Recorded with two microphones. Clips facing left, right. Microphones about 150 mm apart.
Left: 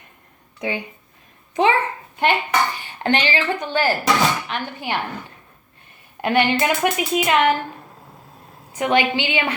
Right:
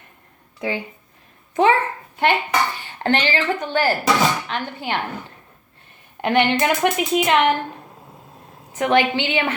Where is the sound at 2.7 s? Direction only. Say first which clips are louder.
Even; 15° left (ahead or behind).